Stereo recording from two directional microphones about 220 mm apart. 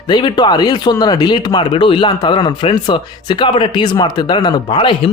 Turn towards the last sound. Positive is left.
turn(degrees=20)  # may be behind; listen again after turning